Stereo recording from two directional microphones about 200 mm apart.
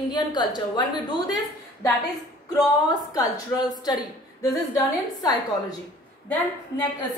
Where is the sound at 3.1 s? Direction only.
20° left (ahead or behind).